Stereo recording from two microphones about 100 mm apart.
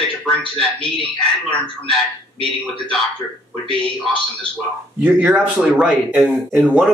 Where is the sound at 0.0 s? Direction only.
10° left (ahead or behind).